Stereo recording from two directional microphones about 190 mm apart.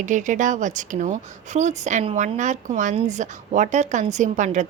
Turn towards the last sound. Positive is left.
turn(degrees=-40)  # may be behind; listen again after turning